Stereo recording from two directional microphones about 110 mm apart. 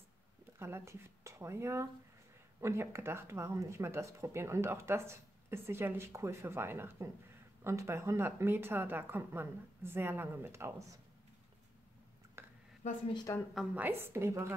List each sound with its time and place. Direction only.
0.6 s speech: 25° right (ahead or behind)
12.4 s a sound: 25° right (ahead or behind)
13.3 s a woman's voice: 30° left (ahead or behind)
13.7 s speech: 20° right (ahead or behind)